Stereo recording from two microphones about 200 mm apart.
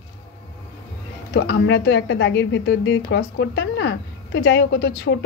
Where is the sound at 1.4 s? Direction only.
60° left (ahead or behind).